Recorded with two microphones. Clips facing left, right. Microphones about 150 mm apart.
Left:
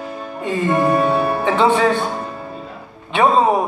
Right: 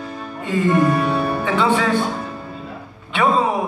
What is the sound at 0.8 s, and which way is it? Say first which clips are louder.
Music: left 2 dB; 45° left (ahead or behind).